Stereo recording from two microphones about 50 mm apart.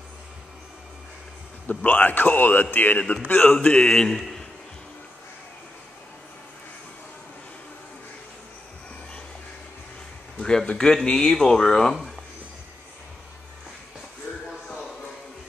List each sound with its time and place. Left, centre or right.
1.7 s a man's voice: left
3.0 s speech: left
3.3 s a man's voice: left
3.5 s speech: centre
10.4 s speech: centre